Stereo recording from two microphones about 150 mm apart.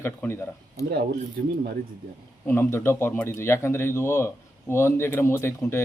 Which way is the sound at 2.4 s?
15° left (ahead or behind).